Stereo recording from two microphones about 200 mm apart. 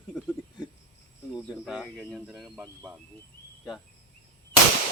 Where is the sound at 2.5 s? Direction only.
15° right (ahead or behind).